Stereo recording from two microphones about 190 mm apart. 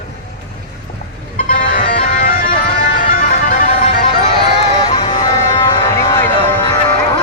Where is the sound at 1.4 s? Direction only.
50° left (ahead or behind).